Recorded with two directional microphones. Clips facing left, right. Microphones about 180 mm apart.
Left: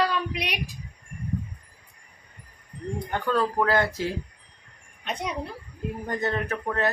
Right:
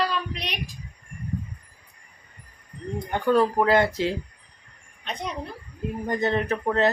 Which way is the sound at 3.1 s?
15° right (ahead or behind).